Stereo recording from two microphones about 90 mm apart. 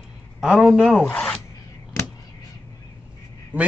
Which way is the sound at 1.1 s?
10° left (ahead or behind).